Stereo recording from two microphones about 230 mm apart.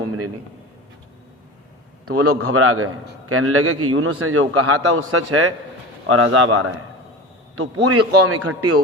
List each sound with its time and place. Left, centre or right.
2.0 s a man's voice: right
7.5 s a man's voice: right